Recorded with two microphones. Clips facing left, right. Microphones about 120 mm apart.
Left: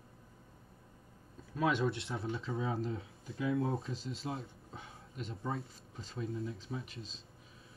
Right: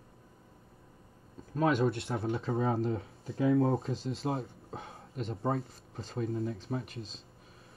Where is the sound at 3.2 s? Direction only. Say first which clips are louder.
Right 7 dB; 30° right (ahead or behind).